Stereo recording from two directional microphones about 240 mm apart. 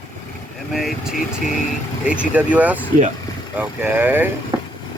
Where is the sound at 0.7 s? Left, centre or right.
Centre.